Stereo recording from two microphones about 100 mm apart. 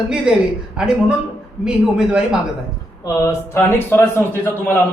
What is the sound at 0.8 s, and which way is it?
Speech, 10° right (ahead or behind).